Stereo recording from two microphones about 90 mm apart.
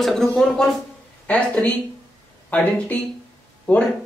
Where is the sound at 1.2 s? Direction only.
15° left (ahead or behind).